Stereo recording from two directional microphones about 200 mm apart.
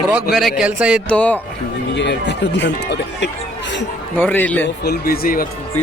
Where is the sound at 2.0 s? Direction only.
60° left (ahead or behind).